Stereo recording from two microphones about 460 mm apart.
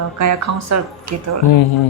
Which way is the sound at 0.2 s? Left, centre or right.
Right.